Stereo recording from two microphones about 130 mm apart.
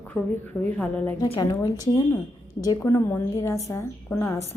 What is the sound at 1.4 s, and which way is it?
Speech, 25° left (ahead or behind).